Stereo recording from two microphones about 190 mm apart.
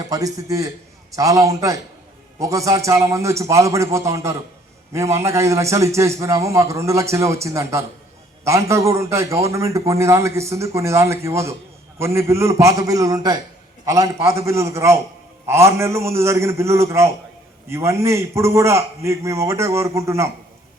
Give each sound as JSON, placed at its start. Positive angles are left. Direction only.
{"t": 0.1, "sound": "a man's voice", "side_deg": -20}